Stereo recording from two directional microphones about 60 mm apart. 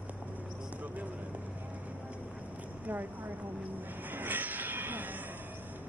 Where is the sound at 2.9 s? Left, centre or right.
Right.